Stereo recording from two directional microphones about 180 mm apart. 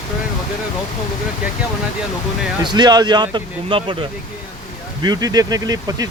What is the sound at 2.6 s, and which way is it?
Speech, 25° right (ahead or behind).